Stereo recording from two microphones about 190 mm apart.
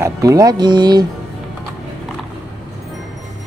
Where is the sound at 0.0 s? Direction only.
15° right (ahead or behind).